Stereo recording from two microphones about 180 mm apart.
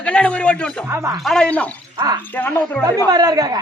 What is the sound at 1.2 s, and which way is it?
Speech, centre (ahead or behind).